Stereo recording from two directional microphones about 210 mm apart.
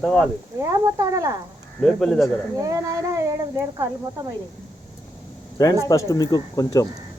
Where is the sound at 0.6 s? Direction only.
15° right (ahead or behind).